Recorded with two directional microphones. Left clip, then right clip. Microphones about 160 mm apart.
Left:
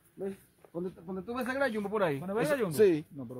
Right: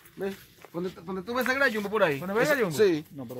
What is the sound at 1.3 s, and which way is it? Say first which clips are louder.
Speech: right 7 dB; 50° left (ahead or behind).